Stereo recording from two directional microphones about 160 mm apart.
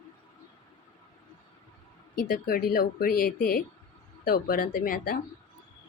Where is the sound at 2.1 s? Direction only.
60° left (ahead or behind).